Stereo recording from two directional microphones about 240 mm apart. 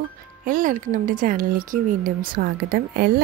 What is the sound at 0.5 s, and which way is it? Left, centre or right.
Speech, right.